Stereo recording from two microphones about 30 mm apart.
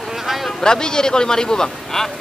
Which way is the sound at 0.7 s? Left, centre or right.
Left.